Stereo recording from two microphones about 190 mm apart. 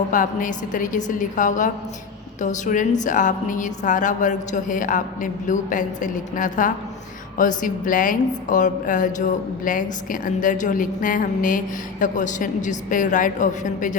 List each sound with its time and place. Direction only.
0.1 s a woman's voice: 45° left (ahead or behind)